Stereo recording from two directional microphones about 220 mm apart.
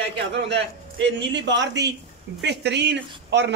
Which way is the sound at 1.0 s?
55° right (ahead or behind).